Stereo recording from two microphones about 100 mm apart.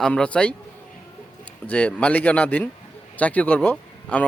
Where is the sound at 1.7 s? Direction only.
15° left (ahead or behind).